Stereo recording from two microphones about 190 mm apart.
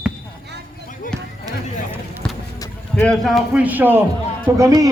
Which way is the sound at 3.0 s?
Centre (ahead or behind).